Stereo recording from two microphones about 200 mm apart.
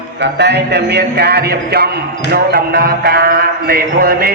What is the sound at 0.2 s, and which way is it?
A man's voice, 60° right (ahead or behind).